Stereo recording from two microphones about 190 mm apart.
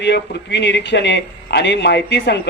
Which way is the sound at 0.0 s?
65° left (ahead or behind).